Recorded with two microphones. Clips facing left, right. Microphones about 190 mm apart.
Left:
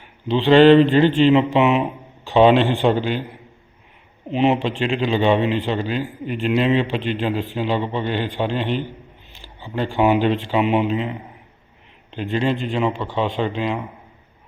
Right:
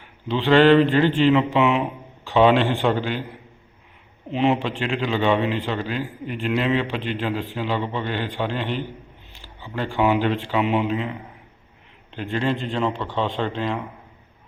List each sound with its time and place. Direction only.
0.3 s a man's voice: 25° left (ahead or behind)
4.3 s a man's voice: 20° left (ahead or behind)
12.1 s a man's voice: 20° left (ahead or behind)